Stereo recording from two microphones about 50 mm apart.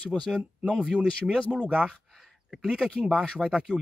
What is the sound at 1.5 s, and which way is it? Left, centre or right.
Speech, centre.